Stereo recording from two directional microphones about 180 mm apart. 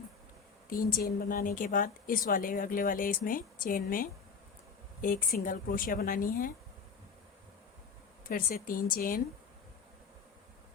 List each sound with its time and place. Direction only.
0.7 s speech: 55° left (ahead or behind)
8.3 s speech: 55° left (ahead or behind)